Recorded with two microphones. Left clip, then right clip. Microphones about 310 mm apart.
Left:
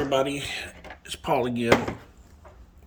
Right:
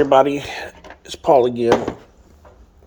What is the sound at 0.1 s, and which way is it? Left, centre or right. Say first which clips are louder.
Speech: right 11 dB; centre.